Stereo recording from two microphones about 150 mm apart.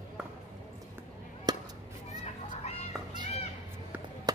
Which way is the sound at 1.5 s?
25° right (ahead or behind).